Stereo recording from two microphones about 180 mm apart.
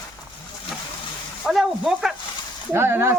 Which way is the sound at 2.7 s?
15° right (ahead or behind).